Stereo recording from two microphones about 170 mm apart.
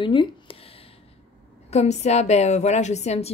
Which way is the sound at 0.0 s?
30° left (ahead or behind).